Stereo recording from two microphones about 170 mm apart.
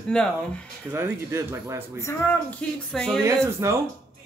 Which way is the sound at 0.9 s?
15° right (ahead or behind).